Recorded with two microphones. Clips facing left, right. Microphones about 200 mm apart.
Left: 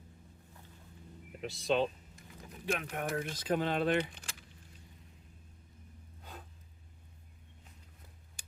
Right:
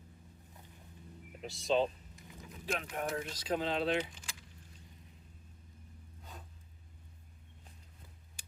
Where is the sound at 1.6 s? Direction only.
65° left (ahead or behind).